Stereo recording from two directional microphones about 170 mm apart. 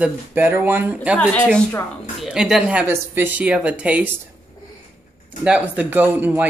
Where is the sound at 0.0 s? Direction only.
10° right (ahead or behind).